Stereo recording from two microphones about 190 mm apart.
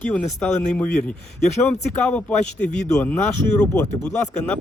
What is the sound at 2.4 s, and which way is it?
Speech, 40° left (ahead or behind).